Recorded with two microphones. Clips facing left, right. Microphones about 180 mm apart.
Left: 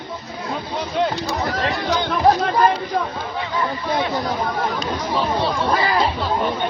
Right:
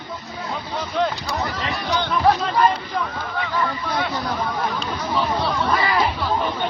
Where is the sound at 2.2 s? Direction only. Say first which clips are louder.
Left 3 dB; 35° left (ahead or behind).